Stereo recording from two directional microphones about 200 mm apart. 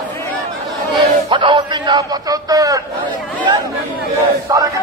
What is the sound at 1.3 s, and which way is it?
A man's voice, 25° right (ahead or behind).